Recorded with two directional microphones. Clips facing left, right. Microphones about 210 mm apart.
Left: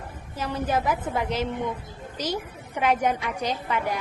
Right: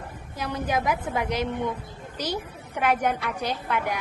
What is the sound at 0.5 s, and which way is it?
Speech, 10° right (ahead or behind).